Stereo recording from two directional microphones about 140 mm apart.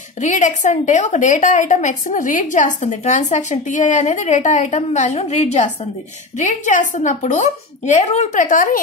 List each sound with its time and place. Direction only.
0.2 s a woman's voice: 60° left (ahead or behind)
6.3 s a woman's voice: 65° left (ahead or behind)